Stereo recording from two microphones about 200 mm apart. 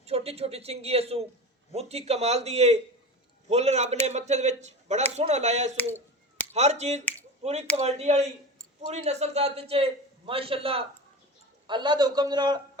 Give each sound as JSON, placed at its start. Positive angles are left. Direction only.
{"t": 0.0, "sound": "a man's voice", "side_deg": -30}